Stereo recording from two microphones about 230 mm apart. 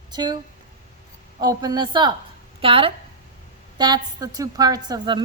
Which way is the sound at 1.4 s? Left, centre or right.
Centre.